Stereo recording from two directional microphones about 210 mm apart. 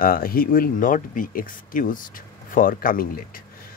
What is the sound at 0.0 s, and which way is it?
Speech, 45° left (ahead or behind).